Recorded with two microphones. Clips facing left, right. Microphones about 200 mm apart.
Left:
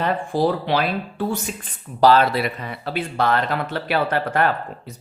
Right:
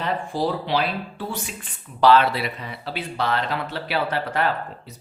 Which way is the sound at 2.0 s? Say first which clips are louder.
Left 2 dB; 40° left (ahead or behind).